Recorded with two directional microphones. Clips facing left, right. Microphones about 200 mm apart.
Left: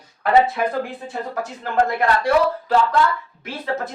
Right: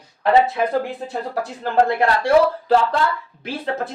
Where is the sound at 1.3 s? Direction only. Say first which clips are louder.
Right 3 dB; 35° right (ahead or behind).